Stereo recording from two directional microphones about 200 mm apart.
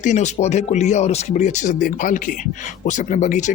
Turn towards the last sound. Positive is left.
turn(degrees=35)  # may be behind; listen again after turning